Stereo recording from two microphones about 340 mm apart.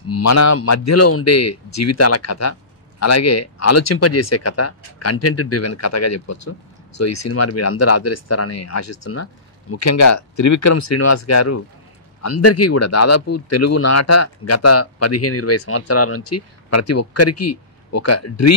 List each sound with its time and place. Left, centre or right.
0.1 s a man's voice: left